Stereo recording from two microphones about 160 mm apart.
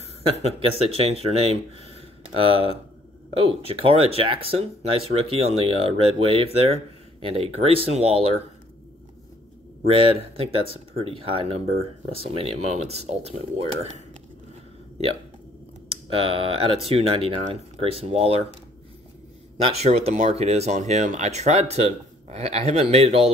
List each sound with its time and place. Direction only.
0.4 s speech: 40° right (ahead or behind)
9.8 s speech: 35° right (ahead or behind)
16.2 s speech: 35° right (ahead or behind)
19.6 s speech: 40° right (ahead or behind)